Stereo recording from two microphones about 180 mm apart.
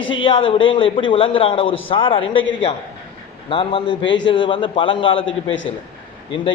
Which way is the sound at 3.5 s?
25° left (ahead or behind).